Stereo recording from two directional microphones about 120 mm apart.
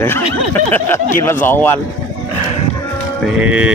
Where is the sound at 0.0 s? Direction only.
20° left (ahead or behind).